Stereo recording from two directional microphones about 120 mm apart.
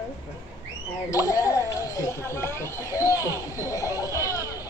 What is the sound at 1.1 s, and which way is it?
Speech, 30° left (ahead or behind).